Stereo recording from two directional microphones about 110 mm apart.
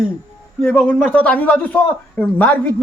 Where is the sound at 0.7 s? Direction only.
15° left (ahead or behind).